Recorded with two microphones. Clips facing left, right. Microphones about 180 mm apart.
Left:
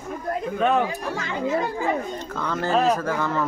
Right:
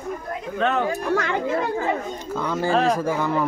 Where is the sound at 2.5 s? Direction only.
10° right (ahead or behind).